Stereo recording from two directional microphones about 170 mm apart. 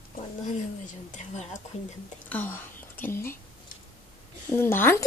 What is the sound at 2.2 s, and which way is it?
Speech, 10° left (ahead or behind).